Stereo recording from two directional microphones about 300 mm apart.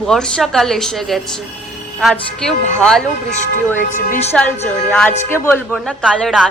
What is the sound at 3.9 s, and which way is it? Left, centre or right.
Speech, left.